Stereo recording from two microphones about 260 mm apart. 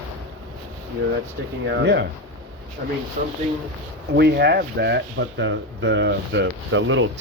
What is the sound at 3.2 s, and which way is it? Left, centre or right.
Speech, right.